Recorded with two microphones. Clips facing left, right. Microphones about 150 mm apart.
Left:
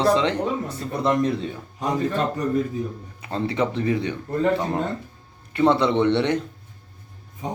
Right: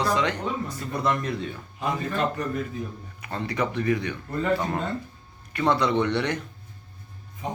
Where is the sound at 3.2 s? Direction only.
25° left (ahead or behind).